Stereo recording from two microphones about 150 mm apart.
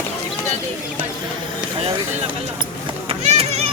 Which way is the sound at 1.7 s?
40° right (ahead or behind).